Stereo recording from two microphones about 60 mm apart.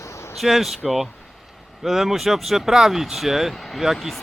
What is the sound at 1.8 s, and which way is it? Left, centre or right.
Speech, centre.